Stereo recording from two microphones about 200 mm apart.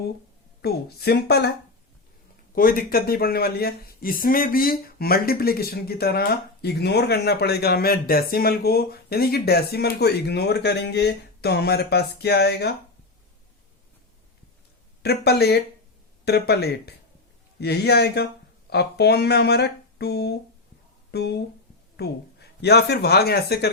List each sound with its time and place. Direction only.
0.6 s speech: 50° left (ahead or behind)
2.6 s speech: 45° left (ahead or behind)
15.0 s speech: 55° left (ahead or behind)